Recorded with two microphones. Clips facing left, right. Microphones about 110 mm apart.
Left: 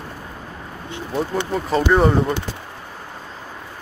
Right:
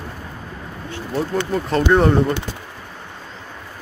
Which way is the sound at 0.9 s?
20° left (ahead or behind).